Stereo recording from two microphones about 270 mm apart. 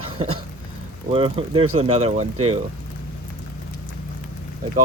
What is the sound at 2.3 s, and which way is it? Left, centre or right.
Speech, right.